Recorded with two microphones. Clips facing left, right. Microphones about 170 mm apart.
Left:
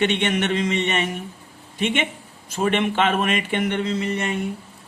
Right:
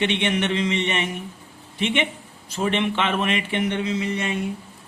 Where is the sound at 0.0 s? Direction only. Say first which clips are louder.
Left 1 dB; 50° left (ahead or behind).